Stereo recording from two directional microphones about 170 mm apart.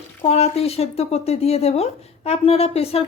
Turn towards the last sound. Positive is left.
turn(degrees=35)  # may be behind; listen again after turning